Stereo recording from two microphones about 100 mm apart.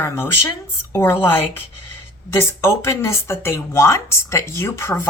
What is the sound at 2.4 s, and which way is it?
Speech, 25° left (ahead or behind).